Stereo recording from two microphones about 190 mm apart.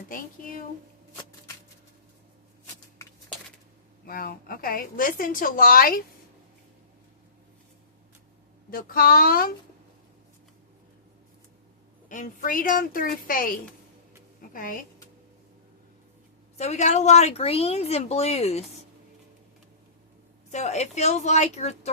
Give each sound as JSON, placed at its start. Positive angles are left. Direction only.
{"t": 0.1, "sound": "a child's voice", "side_deg": 45}
{"t": 4.0, "sound": "a woman's voice", "side_deg": 50}
{"t": 8.7, "sound": "a woman's voice", "side_deg": 50}
{"t": 12.0, "sound": "a woman's voice", "side_deg": 40}
{"t": 16.6, "sound": "a woman's voice", "side_deg": 35}
{"t": 20.5, "sound": "a woman's voice", "side_deg": 35}